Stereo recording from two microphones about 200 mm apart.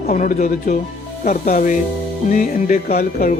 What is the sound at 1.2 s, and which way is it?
Speech, 40° left (ahead or behind).